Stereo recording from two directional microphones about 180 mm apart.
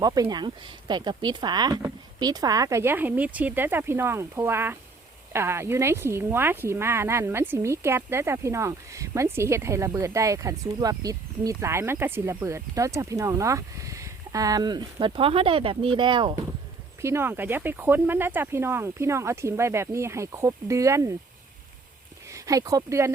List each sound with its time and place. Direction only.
0.0 s speech: 20° right (ahead or behind)
17.0 s speech: 15° right (ahead or behind)
22.3 s speech: 20° right (ahead or behind)